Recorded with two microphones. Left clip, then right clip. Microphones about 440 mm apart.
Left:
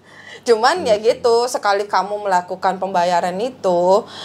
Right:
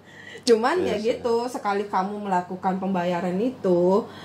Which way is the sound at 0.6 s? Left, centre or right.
Left.